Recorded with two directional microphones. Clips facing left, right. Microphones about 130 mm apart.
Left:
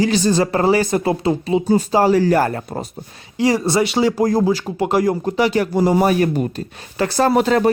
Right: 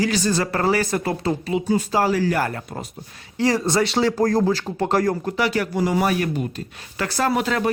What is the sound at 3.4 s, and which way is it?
Speech, 10° left (ahead or behind).